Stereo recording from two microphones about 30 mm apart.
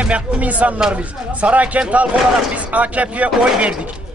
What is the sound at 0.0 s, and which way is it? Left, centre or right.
A man's voice, right.